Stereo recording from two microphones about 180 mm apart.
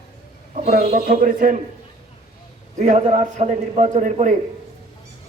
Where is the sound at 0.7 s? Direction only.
50° right (ahead or behind).